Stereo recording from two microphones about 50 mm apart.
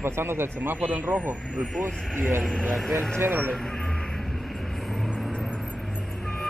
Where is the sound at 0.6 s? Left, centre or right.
Right.